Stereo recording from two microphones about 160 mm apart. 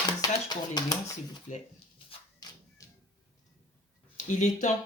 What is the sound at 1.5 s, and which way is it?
Speech, 50° left (ahead or behind).